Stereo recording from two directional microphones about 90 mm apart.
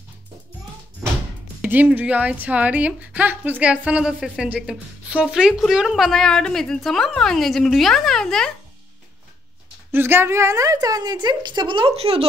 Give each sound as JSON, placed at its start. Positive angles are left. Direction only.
{"t": 1.6, "sound": "a woman's voice", "side_deg": -15}
{"t": 9.8, "sound": "a woman's voice", "side_deg": -25}